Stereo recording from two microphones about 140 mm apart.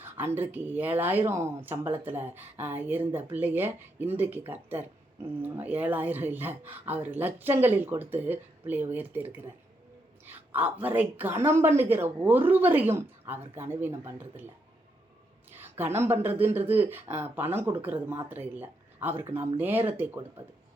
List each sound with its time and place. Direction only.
0.0 s speech: 15° right (ahead or behind)
10.5 s speech: 15° right (ahead or behind)
15.8 s speech: 15° right (ahead or behind)